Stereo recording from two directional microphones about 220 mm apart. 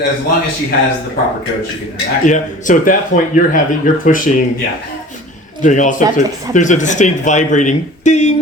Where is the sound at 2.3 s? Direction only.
35° left (ahead or behind).